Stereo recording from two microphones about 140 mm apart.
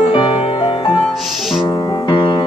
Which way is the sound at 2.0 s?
35° left (ahead or behind).